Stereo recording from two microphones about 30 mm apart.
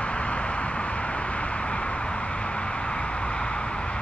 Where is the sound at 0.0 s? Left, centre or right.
Left.